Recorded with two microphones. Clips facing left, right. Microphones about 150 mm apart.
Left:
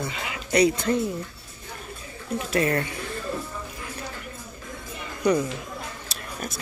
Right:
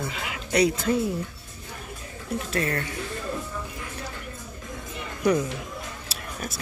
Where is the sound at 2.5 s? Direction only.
20° left (ahead or behind).